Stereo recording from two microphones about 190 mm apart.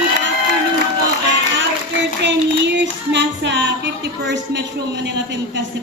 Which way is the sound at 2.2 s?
70° right (ahead or behind).